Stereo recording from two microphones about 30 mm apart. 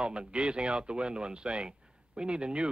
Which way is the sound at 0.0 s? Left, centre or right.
Right.